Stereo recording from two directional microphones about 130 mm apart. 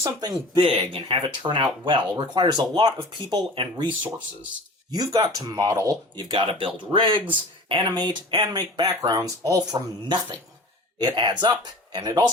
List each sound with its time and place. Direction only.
0.0 s speech: 30° right (ahead or behind)